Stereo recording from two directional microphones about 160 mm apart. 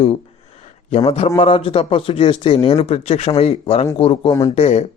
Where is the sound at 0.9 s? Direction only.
40° left (ahead or behind).